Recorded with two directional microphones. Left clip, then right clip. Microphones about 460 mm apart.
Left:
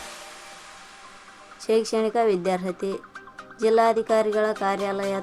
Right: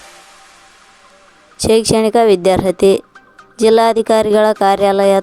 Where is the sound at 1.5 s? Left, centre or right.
Centre.